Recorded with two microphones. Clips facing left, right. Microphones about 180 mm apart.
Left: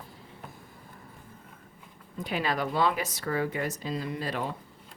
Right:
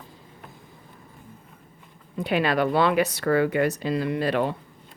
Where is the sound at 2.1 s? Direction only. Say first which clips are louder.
Right 7 dB; 70° right (ahead or behind).